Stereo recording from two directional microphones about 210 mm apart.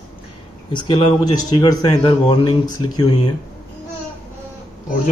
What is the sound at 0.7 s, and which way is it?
Speech, 20° left (ahead or behind).